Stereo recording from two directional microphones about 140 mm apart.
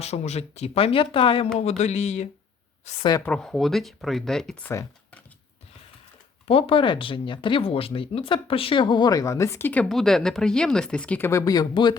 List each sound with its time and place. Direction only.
0.0 s speech: 50° left (ahead or behind)
1.5 s speech: 50° left (ahead or behind)
3.2 s speech: 5° left (ahead or behind)
6.5 s speech: 40° left (ahead or behind); by 11.3 s 10° left (ahead or behind)
11.3 s speech: 25° left (ahead or behind)